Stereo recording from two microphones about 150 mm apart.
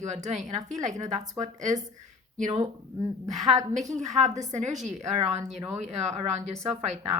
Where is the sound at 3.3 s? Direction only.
50° right (ahead or behind).